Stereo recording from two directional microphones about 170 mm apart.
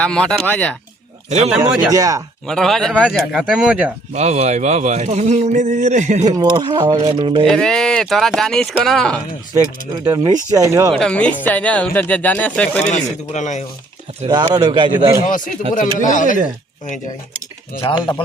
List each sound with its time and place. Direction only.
0.0 s speech: 5° left (ahead or behind)
1.5 s speech: 5° right (ahead or behind)
1.9 s speech: 20° right (ahead or behind)
2.5 s speech: centre (ahead or behind)
4.1 s speech: 40° right (ahead or behind)
6.2 s speech: 25° right (ahead or behind)
7.4 s speech: 5° left (ahead or behind)
10.0 s speech: 20° right (ahead or behind)
10.9 s speech: 5° left (ahead or behind)
12.9 s speech: 45° left (ahead or behind)
14.5 s speech: 25° right (ahead or behind)
15.2 s speech: 50° left (ahead or behind)
17.7 s speech: 25° left (ahead or behind)